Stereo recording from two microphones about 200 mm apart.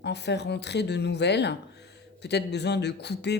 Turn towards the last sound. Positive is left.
turn(degrees=55)  # may be behind; listen again after turning